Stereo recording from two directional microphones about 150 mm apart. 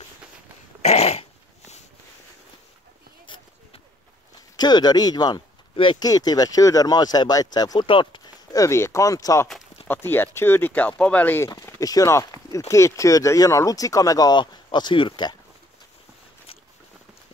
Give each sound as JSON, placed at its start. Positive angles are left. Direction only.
{"t": 0.8, "sound": "dog", "side_deg": 40}
{"t": 4.6, "sound": "speech", "side_deg": 30}
{"t": 8.6, "sound": "speech", "side_deg": 20}